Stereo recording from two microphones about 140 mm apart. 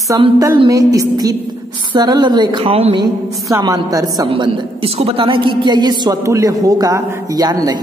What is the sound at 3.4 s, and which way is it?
Speech, 25° right (ahead or behind).